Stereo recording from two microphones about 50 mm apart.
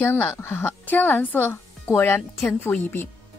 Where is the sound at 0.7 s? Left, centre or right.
Left.